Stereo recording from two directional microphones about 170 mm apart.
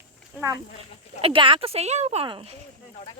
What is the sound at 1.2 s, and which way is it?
Speech, 30° right (ahead or behind).